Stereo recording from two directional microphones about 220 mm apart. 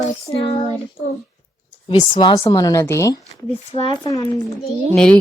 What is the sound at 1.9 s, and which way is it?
Speech, 20° left (ahead or behind).